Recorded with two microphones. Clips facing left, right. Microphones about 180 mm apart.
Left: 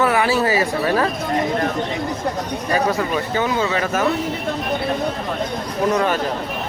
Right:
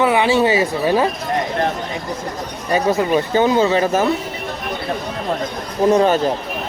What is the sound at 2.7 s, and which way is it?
Speech, 25° right (ahead or behind).